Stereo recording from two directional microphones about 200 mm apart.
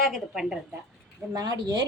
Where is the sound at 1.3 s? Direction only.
20° right (ahead or behind).